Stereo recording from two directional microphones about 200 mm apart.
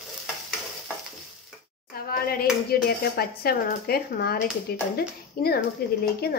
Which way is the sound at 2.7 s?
50° left (ahead or behind).